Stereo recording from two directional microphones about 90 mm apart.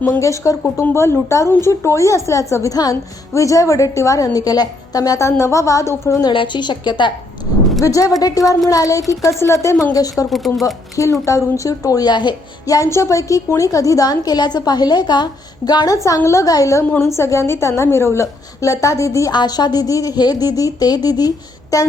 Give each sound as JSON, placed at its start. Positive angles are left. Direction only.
{"t": 0.0, "sound": "a woman's voice", "side_deg": 30}
{"t": 6.3, "sound": "a woman's voice", "side_deg": 65}
{"t": 7.8, "sound": "a woman's voice", "side_deg": 40}
{"t": 10.2, "sound": "speech", "side_deg": 0}
{"t": 10.9, "sound": "a woman's voice", "side_deg": 35}
{"t": 12.6, "sound": "a woman's voice", "side_deg": 40}
{"t": 16.0, "sound": "a woman's voice", "side_deg": 35}
{"t": 19.3, "sound": "a woman's voice", "side_deg": 50}